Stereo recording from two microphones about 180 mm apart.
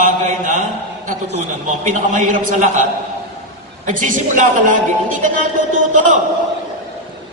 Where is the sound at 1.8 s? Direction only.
45° right (ahead or behind).